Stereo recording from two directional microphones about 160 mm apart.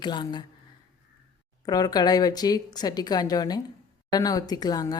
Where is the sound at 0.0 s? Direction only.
30° left (ahead or behind).